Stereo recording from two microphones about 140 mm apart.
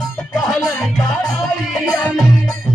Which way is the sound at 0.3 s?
5° left (ahead or behind).